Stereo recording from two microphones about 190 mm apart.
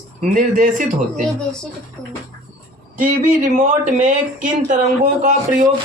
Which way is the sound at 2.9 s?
40° right (ahead or behind).